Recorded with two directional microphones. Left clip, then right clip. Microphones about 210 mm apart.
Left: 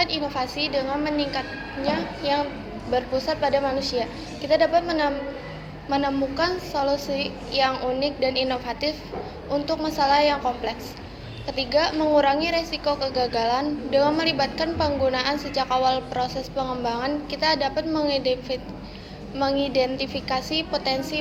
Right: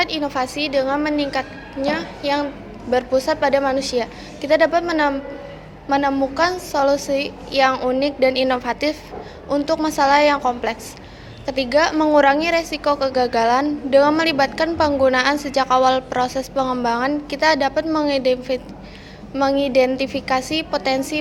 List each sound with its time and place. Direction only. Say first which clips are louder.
0.0 s a woman's voice: right 4 dB; 55° right (ahead or behind)